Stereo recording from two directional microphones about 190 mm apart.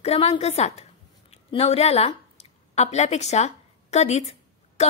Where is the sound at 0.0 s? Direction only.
35° left (ahead or behind).